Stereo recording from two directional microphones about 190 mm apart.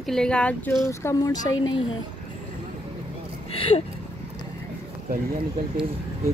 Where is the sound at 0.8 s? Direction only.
15° left (ahead or behind).